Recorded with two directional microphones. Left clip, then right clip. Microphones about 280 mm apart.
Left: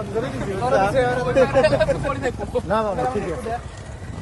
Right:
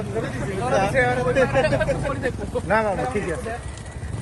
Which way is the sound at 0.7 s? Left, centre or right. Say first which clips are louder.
Left 1 dB; centre.